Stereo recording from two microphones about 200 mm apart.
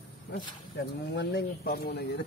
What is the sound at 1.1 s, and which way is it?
Speech, 55° left (ahead or behind).